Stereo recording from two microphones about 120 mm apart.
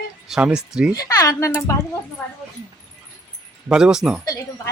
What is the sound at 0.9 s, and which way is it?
Speech, 30° left (ahead or behind).